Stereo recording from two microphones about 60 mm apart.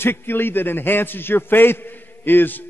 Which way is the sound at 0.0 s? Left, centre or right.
Left.